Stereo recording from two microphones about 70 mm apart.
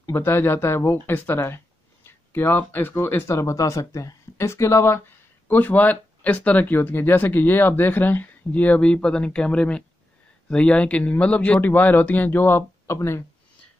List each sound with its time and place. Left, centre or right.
0.0 s speech: left
5.5 s speech: left